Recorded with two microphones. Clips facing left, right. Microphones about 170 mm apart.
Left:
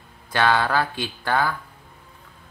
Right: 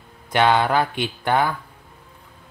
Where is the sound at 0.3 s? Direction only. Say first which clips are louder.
Right 3 dB; 20° right (ahead or behind).